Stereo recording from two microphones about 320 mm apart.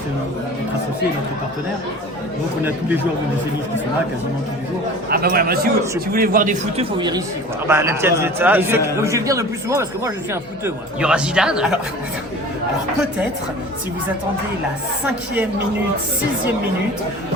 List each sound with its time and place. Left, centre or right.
5.0 s a man's voice: right; by 11.8 s centre